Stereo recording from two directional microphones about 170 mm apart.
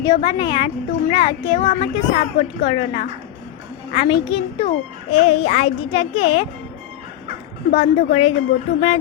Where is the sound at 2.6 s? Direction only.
35° left (ahead or behind).